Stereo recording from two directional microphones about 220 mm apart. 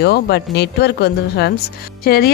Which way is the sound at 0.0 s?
45° left (ahead or behind).